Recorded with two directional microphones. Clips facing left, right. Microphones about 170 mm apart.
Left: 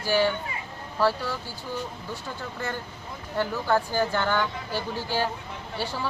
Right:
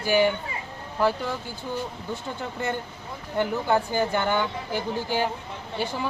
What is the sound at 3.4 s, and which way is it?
Speech, 20° right (ahead or behind).